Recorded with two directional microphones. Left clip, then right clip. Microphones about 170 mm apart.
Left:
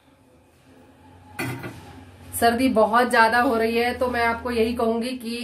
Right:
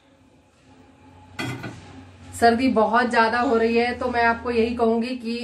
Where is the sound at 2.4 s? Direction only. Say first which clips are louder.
Right 1 dB; 15° left (ahead or behind).